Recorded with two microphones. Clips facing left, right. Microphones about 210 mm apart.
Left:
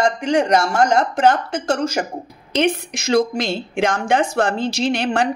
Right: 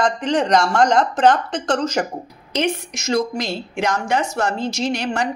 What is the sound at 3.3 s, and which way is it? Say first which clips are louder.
Speech: left 3 dB; 25° left (ahead or behind).